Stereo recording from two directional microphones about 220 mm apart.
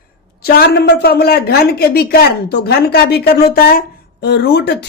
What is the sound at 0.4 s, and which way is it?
A woman's voice, 50° left (ahead or behind).